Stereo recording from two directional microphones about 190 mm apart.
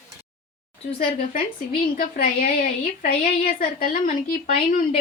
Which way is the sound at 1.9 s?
50° left (ahead or behind).